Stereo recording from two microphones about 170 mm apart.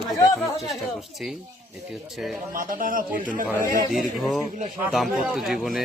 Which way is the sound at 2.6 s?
55° right (ahead or behind).